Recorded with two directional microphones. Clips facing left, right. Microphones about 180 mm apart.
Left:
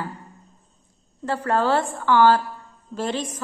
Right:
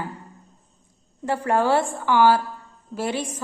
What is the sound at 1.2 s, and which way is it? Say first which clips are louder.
A woman's voice: right 1 dB; 15° right (ahead or behind).